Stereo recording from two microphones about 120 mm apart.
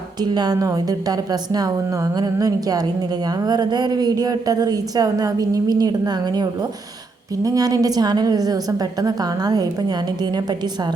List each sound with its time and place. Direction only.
0.2 s a woman's voice: 35° right (ahead or behind)